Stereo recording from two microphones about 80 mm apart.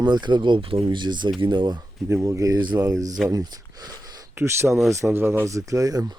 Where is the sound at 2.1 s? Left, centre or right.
Right.